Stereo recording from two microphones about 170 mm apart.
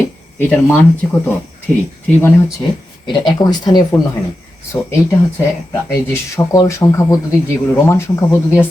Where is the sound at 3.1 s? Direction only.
25° left (ahead or behind).